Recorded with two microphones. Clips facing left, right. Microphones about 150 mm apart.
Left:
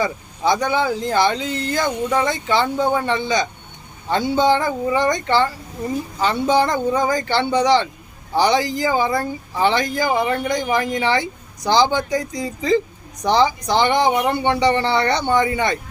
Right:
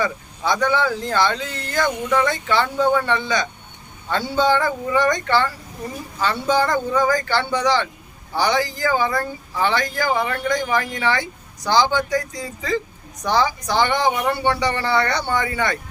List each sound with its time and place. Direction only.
0.0 s speech: 15° left (ahead or behind)